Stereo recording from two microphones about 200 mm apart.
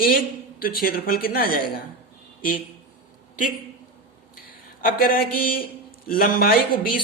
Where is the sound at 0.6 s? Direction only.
45° left (ahead or behind).